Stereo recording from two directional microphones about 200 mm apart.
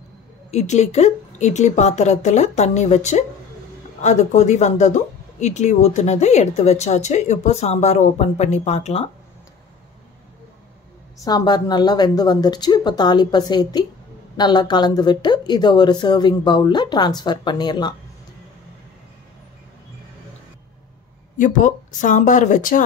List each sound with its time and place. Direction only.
0.5 s speech: 35° left (ahead or behind)
11.2 s a woman's voice: 20° left (ahead or behind)
21.4 s speech: 40° left (ahead or behind)